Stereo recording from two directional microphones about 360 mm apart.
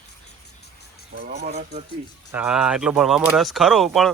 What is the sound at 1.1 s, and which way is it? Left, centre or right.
Speech, right.